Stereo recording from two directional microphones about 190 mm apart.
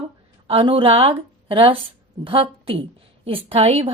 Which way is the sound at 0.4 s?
30° right (ahead or behind).